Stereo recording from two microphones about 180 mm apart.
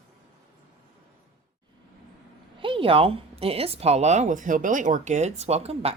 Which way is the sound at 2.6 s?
30° right (ahead or behind).